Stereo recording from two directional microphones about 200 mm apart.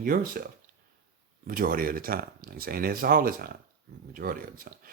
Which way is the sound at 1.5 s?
45° right (ahead or behind).